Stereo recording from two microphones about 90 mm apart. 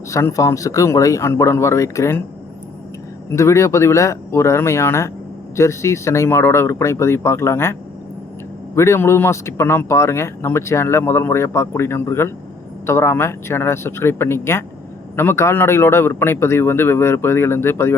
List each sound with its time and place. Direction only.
0.1 s speech: 35° left (ahead or behind)
3.3 s speech: 35° left (ahead or behind)